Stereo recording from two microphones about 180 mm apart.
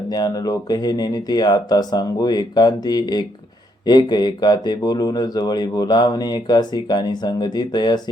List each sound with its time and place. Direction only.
0.1 s speech: 20° left (ahead or behind)